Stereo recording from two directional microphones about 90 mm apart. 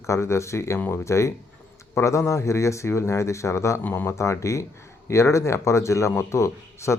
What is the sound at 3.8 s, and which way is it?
Speech, 20° left (ahead or behind).